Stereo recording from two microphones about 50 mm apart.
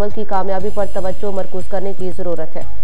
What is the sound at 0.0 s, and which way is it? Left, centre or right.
Speech, right.